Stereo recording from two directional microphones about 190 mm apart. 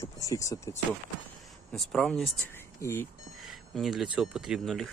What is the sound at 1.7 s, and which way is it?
Speech, centre (ahead or behind).